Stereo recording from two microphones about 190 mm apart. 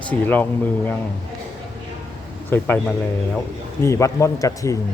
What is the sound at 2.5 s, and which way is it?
A man's voice, 10° left (ahead or behind).